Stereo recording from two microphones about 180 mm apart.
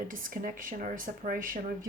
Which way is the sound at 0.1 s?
50° right (ahead or behind).